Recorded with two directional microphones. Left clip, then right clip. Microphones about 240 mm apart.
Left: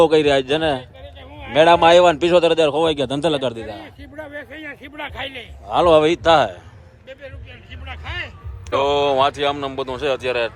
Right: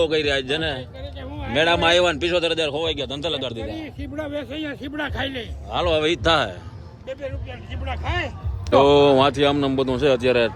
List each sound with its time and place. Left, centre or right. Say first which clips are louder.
0.0 s speech: left 6 dB; centre
3.1 s a man's voice: left 6 dB; left
4.1 s a man's voice: right 4 dB; right
5.6 s speech: left 7 dB; centre
7.9 s a man's voice: right 3 dB; right
8.7 s speech: right 3 dB; centre